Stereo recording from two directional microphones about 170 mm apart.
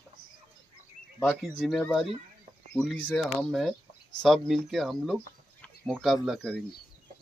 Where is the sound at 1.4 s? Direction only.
Centre (ahead or behind).